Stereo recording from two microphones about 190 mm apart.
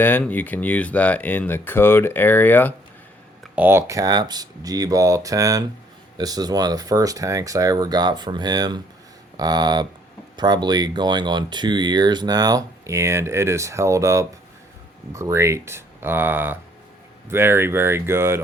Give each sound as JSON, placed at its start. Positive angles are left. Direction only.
{"t": 0.0, "sound": "speech", "side_deg": 10}
{"t": 3.4, "sound": "speech", "side_deg": -10}